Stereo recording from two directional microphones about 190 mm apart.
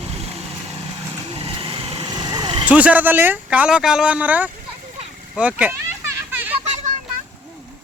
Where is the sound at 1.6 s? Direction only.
30° right (ahead or behind).